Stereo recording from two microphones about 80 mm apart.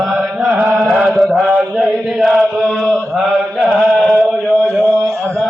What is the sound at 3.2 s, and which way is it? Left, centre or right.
Mantra, centre.